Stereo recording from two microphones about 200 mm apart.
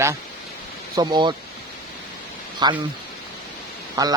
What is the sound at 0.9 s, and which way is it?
Speech, 20° right (ahead or behind).